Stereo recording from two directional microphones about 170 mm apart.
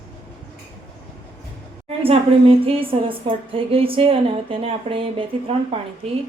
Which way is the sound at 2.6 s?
35° right (ahead or behind).